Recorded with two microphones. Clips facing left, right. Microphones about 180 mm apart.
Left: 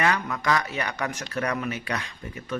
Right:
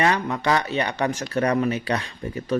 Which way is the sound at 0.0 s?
30° right (ahead or behind).